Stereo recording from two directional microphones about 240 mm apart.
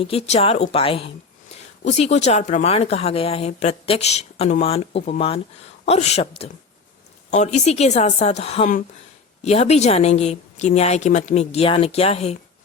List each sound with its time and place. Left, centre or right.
0.0 s speech: left